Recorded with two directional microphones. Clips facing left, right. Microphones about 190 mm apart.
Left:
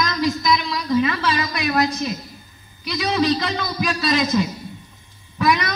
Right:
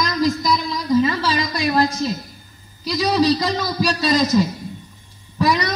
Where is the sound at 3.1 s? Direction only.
35° right (ahead or behind).